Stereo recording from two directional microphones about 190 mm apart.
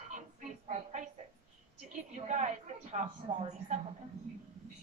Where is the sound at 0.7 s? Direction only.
40° right (ahead or behind).